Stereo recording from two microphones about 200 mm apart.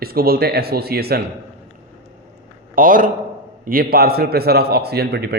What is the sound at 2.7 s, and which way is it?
A man's voice, 45° right (ahead or behind).